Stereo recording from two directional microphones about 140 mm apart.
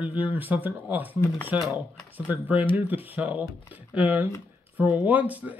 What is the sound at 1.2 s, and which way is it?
Speech, 20° left (ahead or behind).